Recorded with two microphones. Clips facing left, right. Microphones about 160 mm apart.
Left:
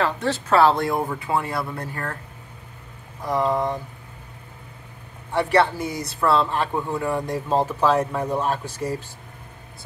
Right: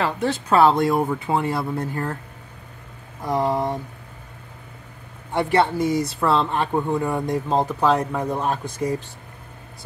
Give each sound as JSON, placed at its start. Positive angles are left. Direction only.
{"t": 0.5, "sound": "speech", "side_deg": -15}
{"t": 3.2, "sound": "speech", "side_deg": -25}
{"t": 5.4, "sound": "speech", "side_deg": -25}